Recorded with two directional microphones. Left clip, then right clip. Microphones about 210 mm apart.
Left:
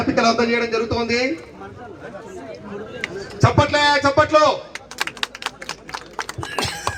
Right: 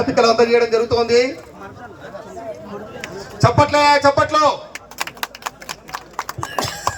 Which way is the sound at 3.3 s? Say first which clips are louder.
Right 3 dB; 45° left (ahead or behind).